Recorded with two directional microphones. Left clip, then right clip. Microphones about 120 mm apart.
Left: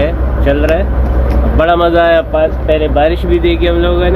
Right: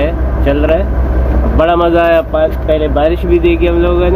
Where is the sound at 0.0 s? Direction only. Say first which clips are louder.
Left 1 dB; centre (ahead or behind).